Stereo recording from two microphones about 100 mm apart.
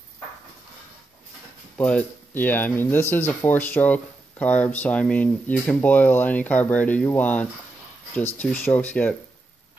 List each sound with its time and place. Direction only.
1.8 s speech: 10° left (ahead or behind)